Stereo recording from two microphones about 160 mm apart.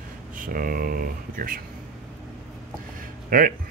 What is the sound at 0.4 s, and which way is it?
Speech, 60° right (ahead or behind).